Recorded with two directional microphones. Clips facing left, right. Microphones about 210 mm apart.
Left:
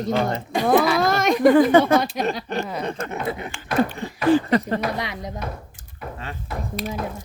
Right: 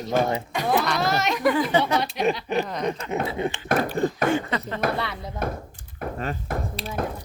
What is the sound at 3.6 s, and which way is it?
Speech, 50° right (ahead or behind).